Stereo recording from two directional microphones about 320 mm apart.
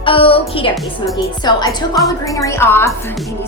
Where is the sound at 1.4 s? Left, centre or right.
Centre.